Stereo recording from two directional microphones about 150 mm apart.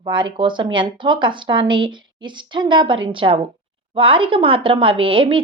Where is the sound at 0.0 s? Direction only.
35° right (ahead or behind).